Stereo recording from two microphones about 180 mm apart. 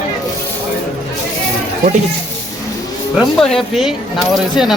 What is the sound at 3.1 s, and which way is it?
Speech, centre (ahead or behind).